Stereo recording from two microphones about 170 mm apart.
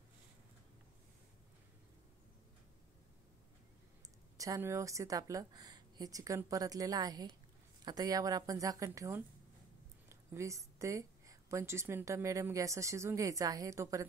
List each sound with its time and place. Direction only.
4.4 s a woman's voice: 15° right (ahead or behind)